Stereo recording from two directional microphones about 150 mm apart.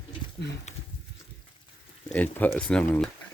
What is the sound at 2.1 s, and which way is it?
Speech, 10° left (ahead or behind).